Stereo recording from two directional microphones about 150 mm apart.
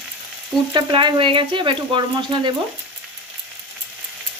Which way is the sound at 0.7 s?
30° right (ahead or behind).